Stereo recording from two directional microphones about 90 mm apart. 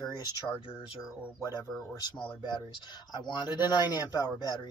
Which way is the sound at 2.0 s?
50° left (ahead or behind).